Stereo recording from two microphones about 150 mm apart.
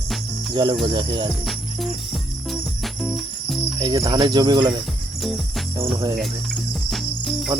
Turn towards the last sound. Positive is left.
turn(degrees=0)  # may be behind; listen again after turning